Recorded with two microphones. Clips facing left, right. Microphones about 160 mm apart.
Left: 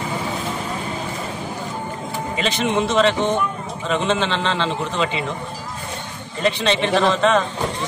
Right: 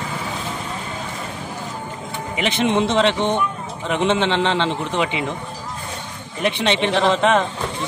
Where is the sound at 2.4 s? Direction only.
20° right (ahead or behind).